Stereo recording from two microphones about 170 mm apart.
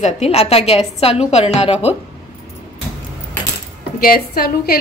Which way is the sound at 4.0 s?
60° left (ahead or behind).